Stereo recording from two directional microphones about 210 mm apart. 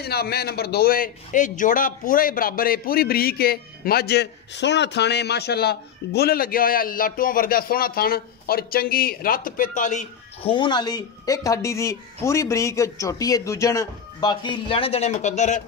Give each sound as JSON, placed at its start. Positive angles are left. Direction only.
{"t": 0.0, "sound": "a man's voice", "side_deg": 50}
{"t": 10.5, "sound": "speech", "side_deg": 20}